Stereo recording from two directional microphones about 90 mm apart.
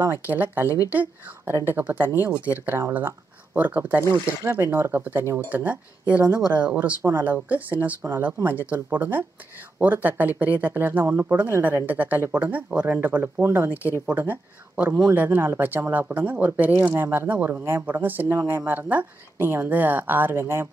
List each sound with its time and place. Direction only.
0.0 s speech: 25° right (ahead or behind)